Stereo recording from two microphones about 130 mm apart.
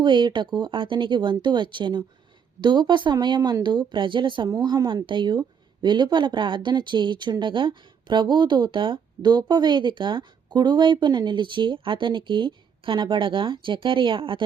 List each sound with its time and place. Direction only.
0.0 s speech: 35° right (ahead or behind)